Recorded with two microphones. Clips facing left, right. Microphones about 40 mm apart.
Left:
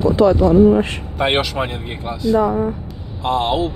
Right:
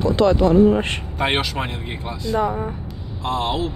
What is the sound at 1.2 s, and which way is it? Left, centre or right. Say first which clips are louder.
Speech: left 4 dB; centre.